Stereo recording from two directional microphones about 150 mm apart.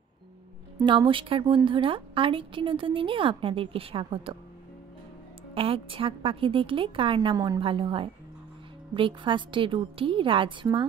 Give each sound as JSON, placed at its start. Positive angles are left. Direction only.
{"t": 0.8, "sound": "a woman's voice", "side_deg": -30}
{"t": 5.5, "sound": "a woman's voice", "side_deg": -35}
{"t": 7.6, "sound": "a woman's voice", "side_deg": -35}